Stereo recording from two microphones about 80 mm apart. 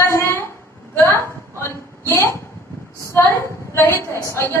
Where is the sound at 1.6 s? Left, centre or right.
Left.